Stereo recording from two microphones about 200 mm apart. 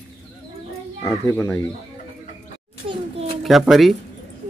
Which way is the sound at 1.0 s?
15° left (ahead or behind).